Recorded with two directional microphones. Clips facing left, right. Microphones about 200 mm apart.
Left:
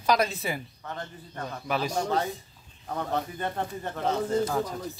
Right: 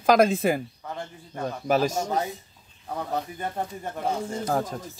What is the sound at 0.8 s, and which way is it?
Speech, 10° right (ahead or behind).